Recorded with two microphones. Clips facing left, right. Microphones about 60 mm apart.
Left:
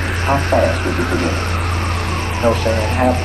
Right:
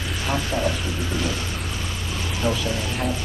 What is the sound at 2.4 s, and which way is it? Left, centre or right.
Speech, left.